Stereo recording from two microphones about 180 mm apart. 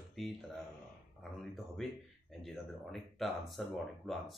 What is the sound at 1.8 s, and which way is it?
Speech, centre (ahead or behind).